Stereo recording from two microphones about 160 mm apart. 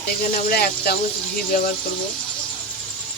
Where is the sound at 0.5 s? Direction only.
80° left.